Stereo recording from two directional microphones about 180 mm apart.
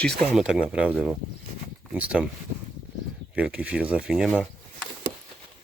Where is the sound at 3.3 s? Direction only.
5° right (ahead or behind).